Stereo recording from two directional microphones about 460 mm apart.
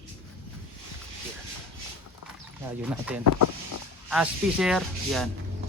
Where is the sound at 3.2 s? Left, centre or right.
Left.